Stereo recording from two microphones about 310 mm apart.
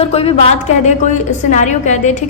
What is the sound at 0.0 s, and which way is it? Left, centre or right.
A woman's voice, centre.